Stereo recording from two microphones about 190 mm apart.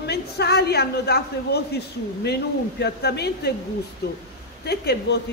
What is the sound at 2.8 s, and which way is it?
A man's voice, 60° left (ahead or behind).